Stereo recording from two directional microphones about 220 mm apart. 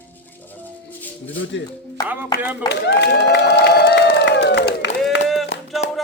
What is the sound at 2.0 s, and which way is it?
Speech, 10° right (ahead or behind).